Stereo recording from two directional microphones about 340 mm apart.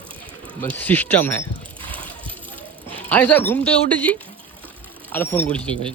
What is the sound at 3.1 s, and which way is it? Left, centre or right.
A man's voice, centre.